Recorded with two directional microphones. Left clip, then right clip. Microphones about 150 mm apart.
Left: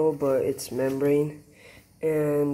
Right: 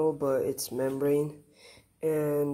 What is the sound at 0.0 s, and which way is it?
Speech, 20° right (ahead or behind).